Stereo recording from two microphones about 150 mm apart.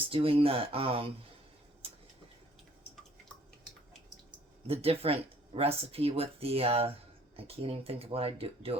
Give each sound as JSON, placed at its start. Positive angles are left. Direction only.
{"t": 0.1, "sound": "speech", "side_deg": -40}
{"t": 4.6, "sound": "speech", "side_deg": -40}